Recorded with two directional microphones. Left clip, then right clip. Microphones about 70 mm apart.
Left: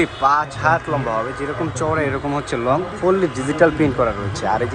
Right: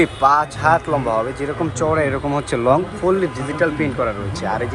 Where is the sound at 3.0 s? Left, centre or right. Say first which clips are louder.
Left 1 dB; left.